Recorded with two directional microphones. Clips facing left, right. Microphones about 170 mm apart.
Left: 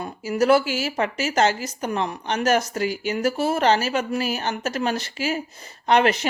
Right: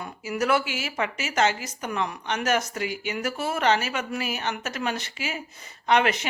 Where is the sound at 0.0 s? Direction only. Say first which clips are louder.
Left 6 dB; 35° left (ahead or behind).